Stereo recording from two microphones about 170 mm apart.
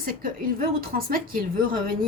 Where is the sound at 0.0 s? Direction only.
60° right (ahead or behind).